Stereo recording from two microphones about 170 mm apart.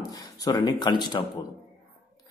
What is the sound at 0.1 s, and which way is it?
Speech, 20° left (ahead or behind).